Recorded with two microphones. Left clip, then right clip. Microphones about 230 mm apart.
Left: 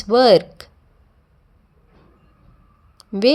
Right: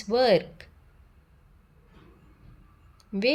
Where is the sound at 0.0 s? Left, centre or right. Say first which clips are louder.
Left 9 dB; left.